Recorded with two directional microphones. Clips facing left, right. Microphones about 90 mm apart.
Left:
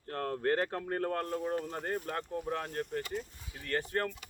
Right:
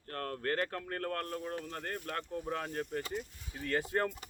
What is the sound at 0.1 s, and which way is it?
Speech, 20° left (ahead or behind).